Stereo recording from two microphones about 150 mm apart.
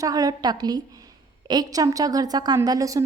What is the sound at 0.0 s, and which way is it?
A woman's voice, 25° right (ahead or behind).